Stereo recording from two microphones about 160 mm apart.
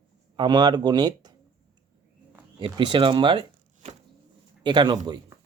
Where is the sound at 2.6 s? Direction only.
30° right (ahead or behind).